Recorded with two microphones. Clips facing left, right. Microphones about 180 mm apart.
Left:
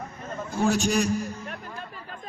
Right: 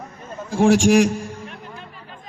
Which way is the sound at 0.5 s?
90° right.